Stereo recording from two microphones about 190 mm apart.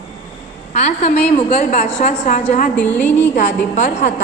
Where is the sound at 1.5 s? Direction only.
35° left (ahead or behind).